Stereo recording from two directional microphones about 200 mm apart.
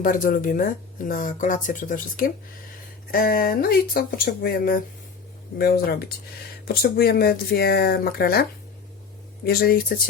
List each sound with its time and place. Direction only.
0.0 s speech: 40° left (ahead or behind)